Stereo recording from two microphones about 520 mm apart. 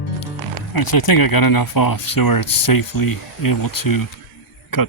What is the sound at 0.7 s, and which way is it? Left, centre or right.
Speech, left.